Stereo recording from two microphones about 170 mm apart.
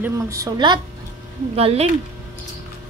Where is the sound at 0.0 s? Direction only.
20° right (ahead or behind).